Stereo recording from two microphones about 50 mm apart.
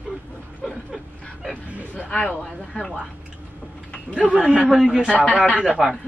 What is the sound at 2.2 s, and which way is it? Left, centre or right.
Speech, centre.